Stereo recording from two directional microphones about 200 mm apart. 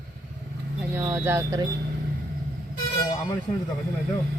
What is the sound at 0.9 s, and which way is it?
Speech, 15° right (ahead or behind).